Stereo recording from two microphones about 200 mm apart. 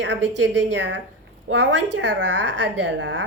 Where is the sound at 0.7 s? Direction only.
60° right (ahead or behind).